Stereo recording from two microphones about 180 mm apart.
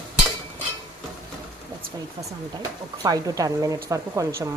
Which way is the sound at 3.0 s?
20° right (ahead or behind).